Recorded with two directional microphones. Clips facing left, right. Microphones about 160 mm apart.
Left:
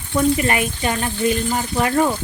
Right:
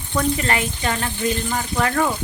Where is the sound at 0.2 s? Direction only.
15° left (ahead or behind).